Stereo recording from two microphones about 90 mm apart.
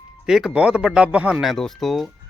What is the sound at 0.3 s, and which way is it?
Speech, 5° right (ahead or behind).